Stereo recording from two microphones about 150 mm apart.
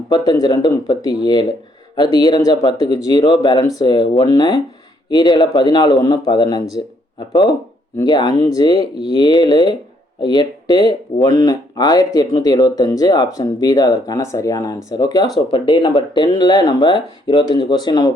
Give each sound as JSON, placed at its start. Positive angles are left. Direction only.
{"t": 0.1, "sound": "speech", "side_deg": 30}
{"t": 8.0, "sound": "speech", "side_deg": 30}